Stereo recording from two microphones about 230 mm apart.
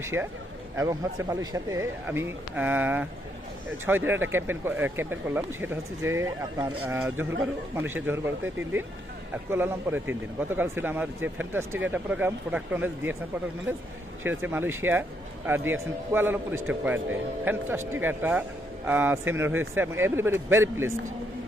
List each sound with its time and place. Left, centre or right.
0.0 s a man's voice: centre
9.3 s a man's voice: centre
14.3 s a man's voice: centre